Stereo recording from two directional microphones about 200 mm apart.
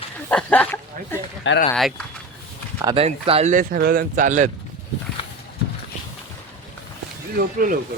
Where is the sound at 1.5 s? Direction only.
70° left (ahead or behind).